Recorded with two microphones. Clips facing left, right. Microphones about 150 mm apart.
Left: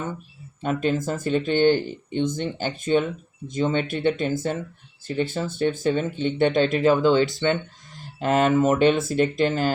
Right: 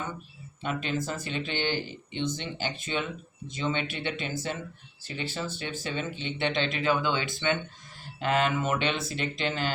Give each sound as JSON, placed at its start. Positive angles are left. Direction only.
{"t": 0.6, "sound": "speech", "side_deg": 45}